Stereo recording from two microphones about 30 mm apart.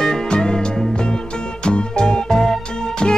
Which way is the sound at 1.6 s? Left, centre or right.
Left.